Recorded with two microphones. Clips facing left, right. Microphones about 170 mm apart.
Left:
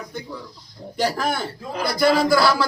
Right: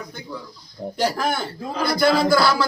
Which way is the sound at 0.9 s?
Centre (ahead or behind).